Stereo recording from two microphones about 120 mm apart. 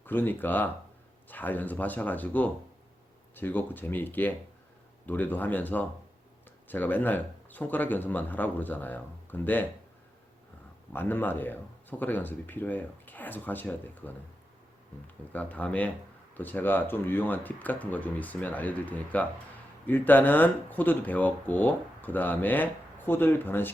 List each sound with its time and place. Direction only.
0.0 s speech: 15° left (ahead or behind)
10.9 s speech: 15° left (ahead or behind)
15.3 s speech: 10° left (ahead or behind)